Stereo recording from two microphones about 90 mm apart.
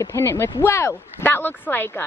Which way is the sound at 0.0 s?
30° left (ahead or behind).